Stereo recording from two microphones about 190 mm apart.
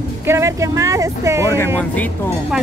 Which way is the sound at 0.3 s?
15° right (ahead or behind).